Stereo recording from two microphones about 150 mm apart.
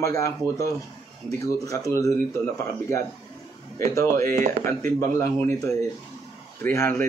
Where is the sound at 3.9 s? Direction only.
20° left (ahead or behind).